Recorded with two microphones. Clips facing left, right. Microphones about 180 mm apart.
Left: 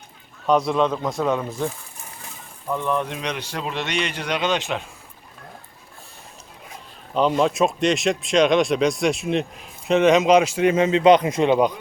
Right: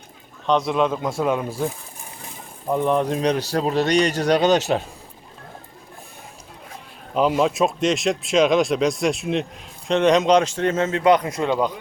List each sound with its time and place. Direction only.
0.4 s speech: centre (ahead or behind)
2.6 s speech: 30° right (ahead or behind)
7.1 s speech: 5° right (ahead or behind); by 11.7 s 20° left (ahead or behind)